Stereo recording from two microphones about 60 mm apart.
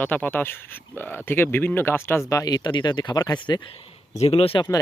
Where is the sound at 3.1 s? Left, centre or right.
Left.